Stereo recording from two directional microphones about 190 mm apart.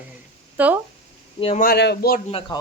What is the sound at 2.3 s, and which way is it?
Speech, 30° left (ahead or behind).